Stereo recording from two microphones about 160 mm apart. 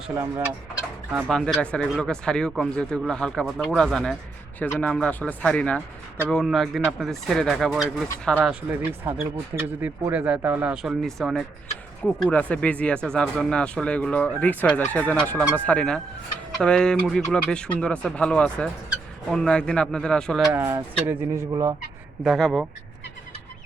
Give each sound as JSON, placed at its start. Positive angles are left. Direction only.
{"t": 0.1, "sound": "speech", "side_deg": -15}
{"t": 1.3, "sound": "speech", "side_deg": 5}
{"t": 8.4, "sound": "speech", "side_deg": -10}
{"t": 20.5, "sound": "speech", "side_deg": -15}
{"t": 21.5, "sound": "fowl", "side_deg": -25}
{"t": 22.2, "sound": "speech", "side_deg": 0}